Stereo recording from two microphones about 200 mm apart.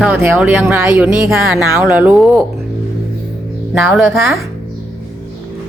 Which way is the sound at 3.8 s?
Centre (ahead or behind).